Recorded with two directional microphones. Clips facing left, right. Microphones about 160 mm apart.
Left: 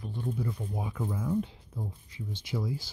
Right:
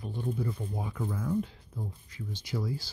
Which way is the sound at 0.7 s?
15° left (ahead or behind).